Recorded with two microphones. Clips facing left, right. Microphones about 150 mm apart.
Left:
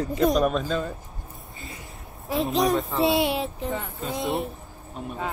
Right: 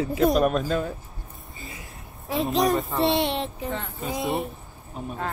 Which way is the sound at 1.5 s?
Centre (ahead or behind).